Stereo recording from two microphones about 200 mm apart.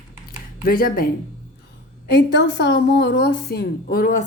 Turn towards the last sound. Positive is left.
turn(degrees=45)  # may be behind; listen again after turning